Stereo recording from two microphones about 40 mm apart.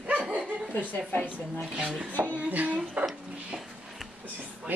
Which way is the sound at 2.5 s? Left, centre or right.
Right.